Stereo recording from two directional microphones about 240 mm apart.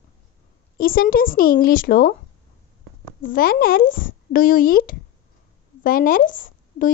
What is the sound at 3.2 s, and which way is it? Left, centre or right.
Speech, left.